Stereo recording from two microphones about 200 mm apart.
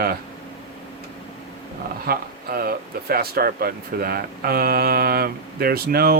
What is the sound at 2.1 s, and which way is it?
Speech, 50° right (ahead or behind).